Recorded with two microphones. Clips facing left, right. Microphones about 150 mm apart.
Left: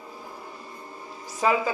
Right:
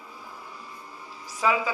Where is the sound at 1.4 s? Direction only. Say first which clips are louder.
Left 2 dB; 40° left (ahead or behind).